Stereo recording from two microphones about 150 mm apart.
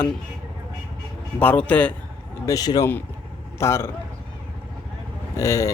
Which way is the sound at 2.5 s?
25° left (ahead or behind).